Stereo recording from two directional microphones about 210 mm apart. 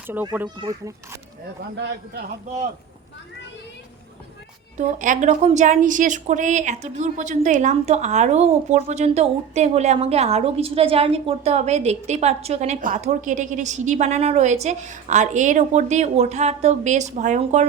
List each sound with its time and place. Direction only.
0.1 s a child's voice: 10° right (ahead or behind)
1.7 s a man's voice: 55° right (ahead or behind)
2.5 s a woman's voice: 35° right (ahead or behind)
4.8 s a woman's voice: 35° right (ahead or behind)